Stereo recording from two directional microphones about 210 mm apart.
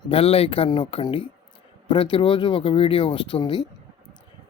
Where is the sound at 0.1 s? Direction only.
25° left (ahead or behind).